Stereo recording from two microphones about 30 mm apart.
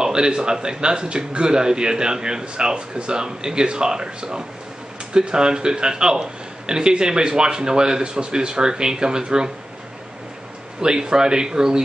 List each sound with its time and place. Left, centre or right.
0.0 s a man's voice: right
10.8 s a man's voice: right